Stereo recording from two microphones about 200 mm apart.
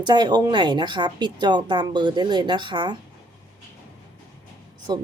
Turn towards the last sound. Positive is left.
turn(degrees=-20)  # may be behind; listen again after turning